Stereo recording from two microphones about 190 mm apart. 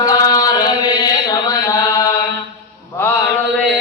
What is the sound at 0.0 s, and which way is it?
Mantra, 20° left (ahead or behind).